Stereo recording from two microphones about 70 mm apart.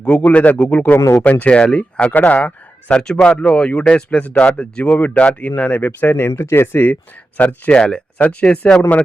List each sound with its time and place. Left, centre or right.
0.0 s speech: centre
0.9 s speech: left
1.2 s speech: left